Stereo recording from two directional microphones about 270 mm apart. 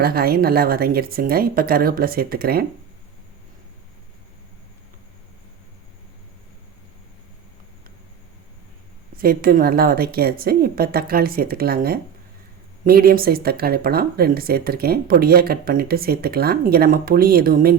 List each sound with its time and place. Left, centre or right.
0.0 s speech: right
9.1 s speech: right